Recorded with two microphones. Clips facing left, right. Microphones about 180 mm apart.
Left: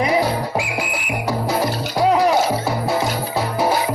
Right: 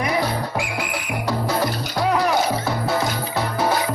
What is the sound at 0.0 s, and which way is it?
Music, 15° left (ahead or behind).